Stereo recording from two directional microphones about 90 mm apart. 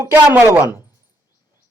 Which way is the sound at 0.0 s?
25° right (ahead or behind).